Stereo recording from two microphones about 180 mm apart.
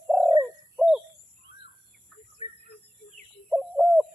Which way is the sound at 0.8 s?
5° right (ahead or behind).